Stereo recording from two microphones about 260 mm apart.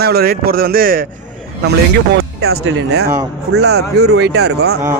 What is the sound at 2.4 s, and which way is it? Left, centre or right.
A man's voice, right.